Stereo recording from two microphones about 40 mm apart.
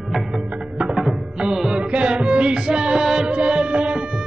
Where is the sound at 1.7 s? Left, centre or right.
Right.